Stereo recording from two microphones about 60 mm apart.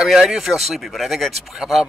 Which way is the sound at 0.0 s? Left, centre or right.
Centre.